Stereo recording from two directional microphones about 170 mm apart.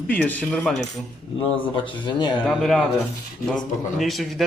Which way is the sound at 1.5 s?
30° left (ahead or behind).